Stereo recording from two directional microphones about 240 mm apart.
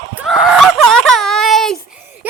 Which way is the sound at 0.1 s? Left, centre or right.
Centre.